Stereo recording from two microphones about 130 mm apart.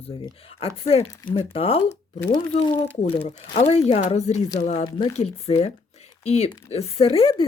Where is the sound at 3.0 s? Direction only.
50° left (ahead or behind).